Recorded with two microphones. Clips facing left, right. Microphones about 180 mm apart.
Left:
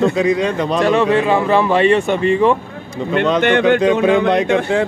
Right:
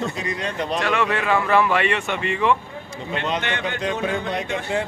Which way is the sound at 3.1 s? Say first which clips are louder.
Left 11 dB; 60° left (ahead or behind).